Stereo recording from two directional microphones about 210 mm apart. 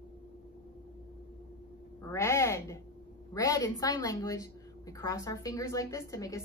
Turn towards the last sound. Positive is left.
turn(degrees=15)  # may be behind; listen again after turning